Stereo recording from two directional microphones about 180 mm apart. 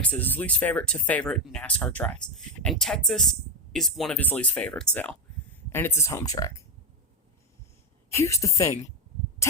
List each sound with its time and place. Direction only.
0.0 s speech: 10° left (ahead or behind)
8.1 s speech: 15° left (ahead or behind)